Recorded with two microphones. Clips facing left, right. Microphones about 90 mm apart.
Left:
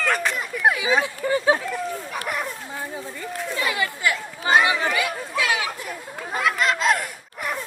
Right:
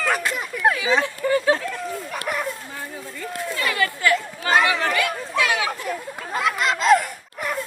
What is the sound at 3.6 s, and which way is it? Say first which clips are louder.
Chatter: right 2 dB; 15° left (ahead or behind).